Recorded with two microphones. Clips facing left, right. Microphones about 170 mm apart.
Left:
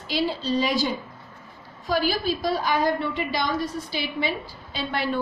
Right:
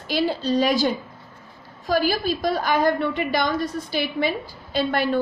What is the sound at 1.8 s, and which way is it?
A woman's voice, 45° right (ahead or behind).